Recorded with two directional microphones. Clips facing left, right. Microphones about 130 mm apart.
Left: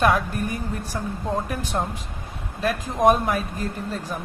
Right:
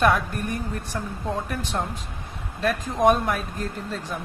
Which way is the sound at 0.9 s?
15° left (ahead or behind).